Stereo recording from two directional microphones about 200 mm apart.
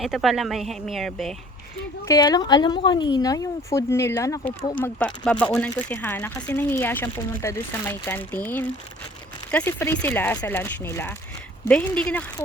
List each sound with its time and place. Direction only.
0.0 s speech: centre (ahead or behind)
2.0 s speech: 20° left (ahead or behind)
4.8 s speech: 5° left (ahead or behind)